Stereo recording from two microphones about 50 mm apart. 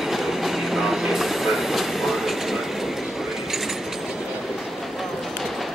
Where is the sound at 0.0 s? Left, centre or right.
Centre.